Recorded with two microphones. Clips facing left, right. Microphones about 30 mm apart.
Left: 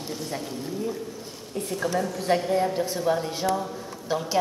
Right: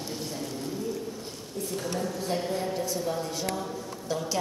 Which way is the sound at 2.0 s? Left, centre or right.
Left.